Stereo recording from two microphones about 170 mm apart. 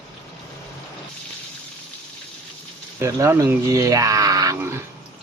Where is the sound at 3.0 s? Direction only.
15° right (ahead or behind).